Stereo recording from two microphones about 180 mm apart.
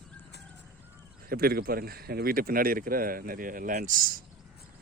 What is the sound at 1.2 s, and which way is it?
Speech, 55° right (ahead or behind).